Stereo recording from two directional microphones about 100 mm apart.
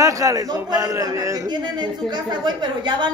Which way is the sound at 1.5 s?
50° right (ahead or behind).